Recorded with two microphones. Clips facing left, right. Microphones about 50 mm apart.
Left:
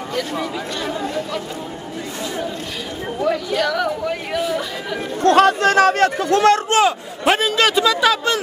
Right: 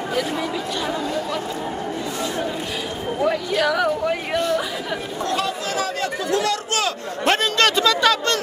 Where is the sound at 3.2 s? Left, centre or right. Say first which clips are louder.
Left 1 dB; centre.